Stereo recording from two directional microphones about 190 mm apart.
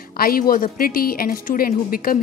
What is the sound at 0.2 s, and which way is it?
A woman's voice, 50° left (ahead or behind).